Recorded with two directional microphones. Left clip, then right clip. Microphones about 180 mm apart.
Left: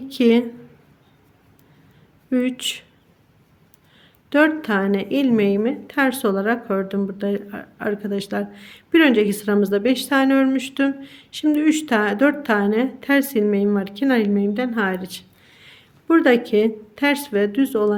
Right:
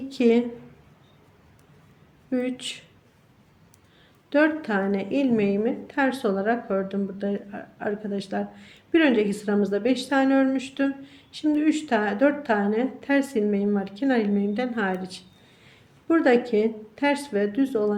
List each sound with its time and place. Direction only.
0.1 s a woman's voice: 30° left (ahead or behind)
2.3 s a woman's voice: 35° left (ahead or behind)
4.3 s a woman's voice: 35° left (ahead or behind)